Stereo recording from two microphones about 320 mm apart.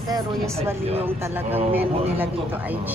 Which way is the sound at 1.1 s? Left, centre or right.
Centre.